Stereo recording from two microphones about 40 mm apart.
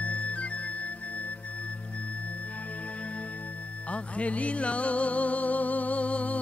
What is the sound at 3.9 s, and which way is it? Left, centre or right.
Music, left.